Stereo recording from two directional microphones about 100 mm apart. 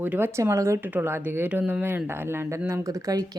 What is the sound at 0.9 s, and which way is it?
Speech, 20° right (ahead or behind).